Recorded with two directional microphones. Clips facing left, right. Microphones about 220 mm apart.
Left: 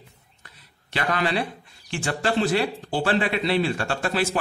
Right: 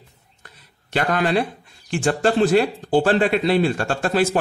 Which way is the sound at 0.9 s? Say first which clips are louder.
Right 5 dB; 50° right (ahead or behind).